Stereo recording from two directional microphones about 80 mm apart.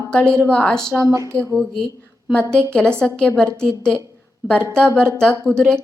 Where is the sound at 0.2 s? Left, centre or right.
Right.